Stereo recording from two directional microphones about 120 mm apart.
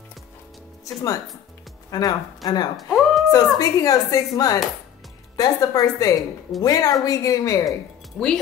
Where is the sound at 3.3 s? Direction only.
30° left (ahead or behind).